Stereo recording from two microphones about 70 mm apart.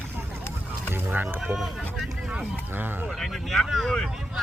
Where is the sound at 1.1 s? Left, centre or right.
Right.